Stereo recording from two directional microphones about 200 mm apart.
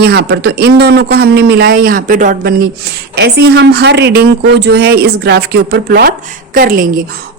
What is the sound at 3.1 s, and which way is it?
A woman's voice, 55° right (ahead or behind).